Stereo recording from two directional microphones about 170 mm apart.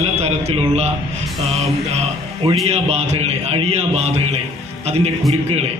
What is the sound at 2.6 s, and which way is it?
Speech, 40° right (ahead or behind).